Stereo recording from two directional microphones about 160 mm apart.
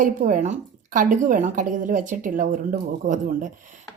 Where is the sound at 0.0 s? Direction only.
55° right (ahead or behind).